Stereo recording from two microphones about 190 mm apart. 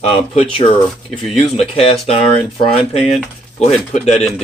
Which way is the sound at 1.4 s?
30° left (ahead or behind).